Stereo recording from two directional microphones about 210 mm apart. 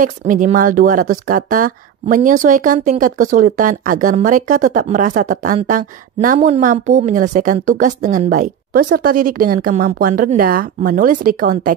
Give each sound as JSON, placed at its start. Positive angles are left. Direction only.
{"t": 0.0, "sound": "speech", "side_deg": -40}